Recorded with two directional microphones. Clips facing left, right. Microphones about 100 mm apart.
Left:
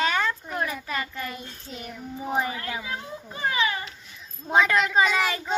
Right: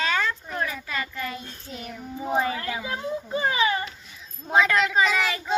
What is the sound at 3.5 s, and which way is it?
Speech, 30° right (ahead or behind).